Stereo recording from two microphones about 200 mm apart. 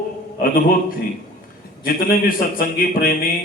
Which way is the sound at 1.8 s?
45° left (ahead or behind).